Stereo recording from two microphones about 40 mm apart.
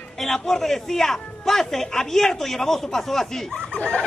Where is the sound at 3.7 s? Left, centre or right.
Left.